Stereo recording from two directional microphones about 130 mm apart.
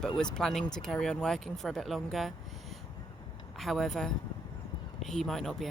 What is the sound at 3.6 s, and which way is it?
Speech, centre (ahead or behind).